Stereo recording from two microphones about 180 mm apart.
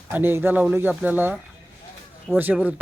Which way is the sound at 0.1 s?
10° right (ahead or behind).